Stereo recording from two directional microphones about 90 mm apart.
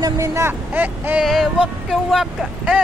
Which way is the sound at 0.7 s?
15° right (ahead or behind).